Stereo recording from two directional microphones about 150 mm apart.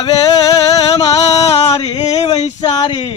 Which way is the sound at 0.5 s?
25° left (ahead or behind).